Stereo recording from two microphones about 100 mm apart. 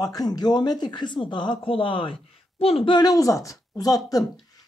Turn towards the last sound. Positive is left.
turn(degrees=40)  # may be behind; listen again after turning